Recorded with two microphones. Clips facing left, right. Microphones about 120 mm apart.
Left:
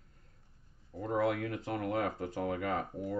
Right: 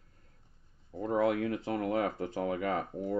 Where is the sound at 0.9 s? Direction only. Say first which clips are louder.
Right 3 dB; 25° right (ahead or behind).